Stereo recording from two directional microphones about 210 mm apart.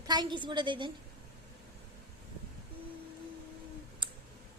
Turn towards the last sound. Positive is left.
turn(degrees=-25)  # may be behind; listen again after turning